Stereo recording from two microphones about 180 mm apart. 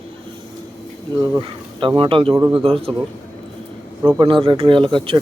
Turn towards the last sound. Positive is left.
turn(degrees=-30)  # may be behind; listen again after turning